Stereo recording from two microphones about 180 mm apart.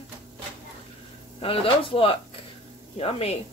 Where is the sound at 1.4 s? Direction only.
30° left (ahead or behind).